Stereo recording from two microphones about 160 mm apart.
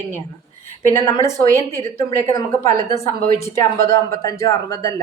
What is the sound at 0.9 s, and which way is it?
A woman's voice, 20° left (ahead or behind).